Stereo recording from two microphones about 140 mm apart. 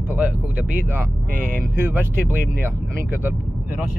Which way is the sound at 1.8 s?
15° right (ahead or behind).